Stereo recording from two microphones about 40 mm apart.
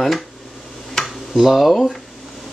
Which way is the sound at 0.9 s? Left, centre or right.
Centre.